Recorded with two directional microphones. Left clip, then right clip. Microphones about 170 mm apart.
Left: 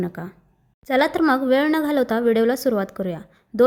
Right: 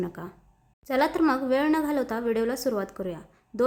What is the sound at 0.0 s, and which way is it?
A woman's voice, 25° left (ahead or behind).